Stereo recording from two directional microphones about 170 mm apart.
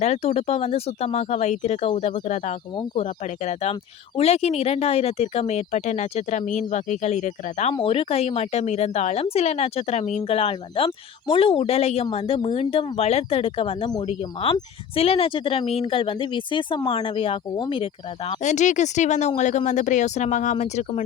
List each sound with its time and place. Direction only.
0.0 s speech: 40° left (ahead or behind)
18.4 s speech: 45° left (ahead or behind)